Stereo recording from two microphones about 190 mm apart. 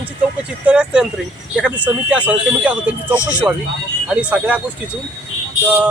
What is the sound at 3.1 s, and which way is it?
Speech, 15° left (ahead or behind).